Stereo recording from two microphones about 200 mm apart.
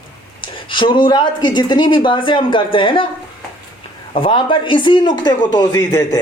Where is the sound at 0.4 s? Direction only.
25° left (ahead or behind).